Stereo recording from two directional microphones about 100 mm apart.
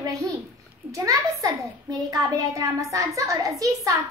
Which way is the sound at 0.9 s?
35° right (ahead or behind).